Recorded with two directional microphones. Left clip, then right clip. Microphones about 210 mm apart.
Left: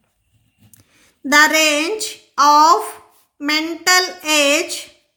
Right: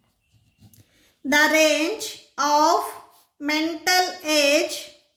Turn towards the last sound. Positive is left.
turn(degrees=50)  # may be behind; listen again after turning